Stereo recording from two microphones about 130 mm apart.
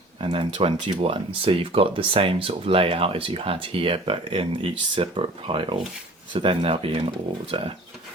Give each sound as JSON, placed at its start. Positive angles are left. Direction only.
{"t": 0.2, "sound": "speech", "side_deg": -40}